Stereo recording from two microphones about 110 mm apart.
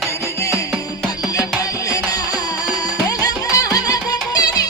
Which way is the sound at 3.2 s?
35° left (ahead or behind).